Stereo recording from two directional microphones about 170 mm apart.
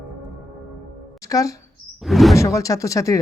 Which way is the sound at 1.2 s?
20° left (ahead or behind).